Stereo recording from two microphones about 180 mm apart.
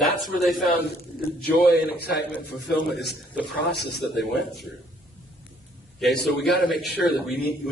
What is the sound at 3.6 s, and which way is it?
Speech, 70° left (ahead or behind).